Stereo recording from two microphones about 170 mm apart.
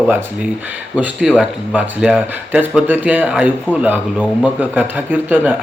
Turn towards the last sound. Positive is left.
turn(degrees=-10)  # may be behind; listen again after turning